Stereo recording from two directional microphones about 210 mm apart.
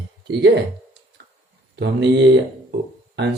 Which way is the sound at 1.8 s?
55° right (ahead or behind).